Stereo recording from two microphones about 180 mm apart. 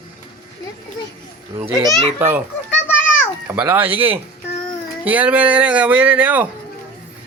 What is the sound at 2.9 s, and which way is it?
Children playing, 10° left (ahead or behind).